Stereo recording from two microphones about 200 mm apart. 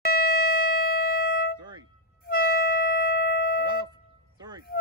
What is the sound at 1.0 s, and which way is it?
Music, 45° left (ahead or behind).